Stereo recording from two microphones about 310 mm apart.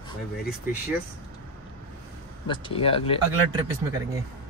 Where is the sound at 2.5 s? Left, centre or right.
Centre.